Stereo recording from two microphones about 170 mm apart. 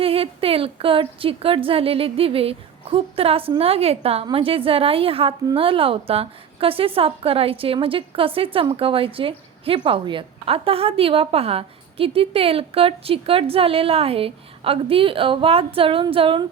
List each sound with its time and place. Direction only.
0.0 s a woman's voice: 35° right (ahead or behind)